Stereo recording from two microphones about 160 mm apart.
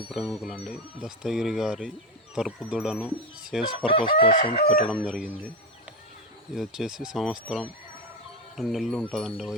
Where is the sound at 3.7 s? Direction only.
35° left (ahead or behind).